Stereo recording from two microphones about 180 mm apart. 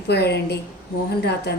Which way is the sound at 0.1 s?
65° left (ahead or behind).